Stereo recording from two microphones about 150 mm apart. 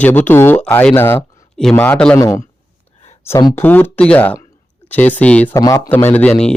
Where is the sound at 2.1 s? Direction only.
25° left (ahead or behind).